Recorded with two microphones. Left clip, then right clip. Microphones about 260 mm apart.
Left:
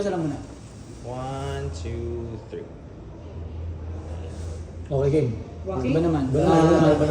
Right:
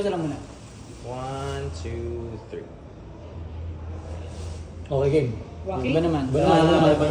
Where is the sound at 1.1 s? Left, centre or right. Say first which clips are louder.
Even; right.